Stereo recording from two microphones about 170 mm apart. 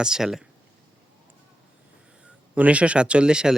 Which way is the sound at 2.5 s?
10° right (ahead or behind).